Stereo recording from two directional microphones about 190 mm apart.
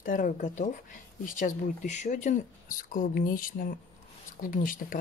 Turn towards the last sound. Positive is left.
turn(degrees=45)  # may be behind; listen again after turning